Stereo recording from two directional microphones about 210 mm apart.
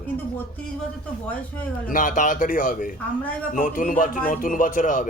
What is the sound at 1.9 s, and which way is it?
A man's voice, 40° left (ahead or behind).